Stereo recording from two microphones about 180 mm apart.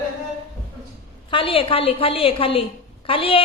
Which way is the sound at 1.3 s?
30° left (ahead or behind).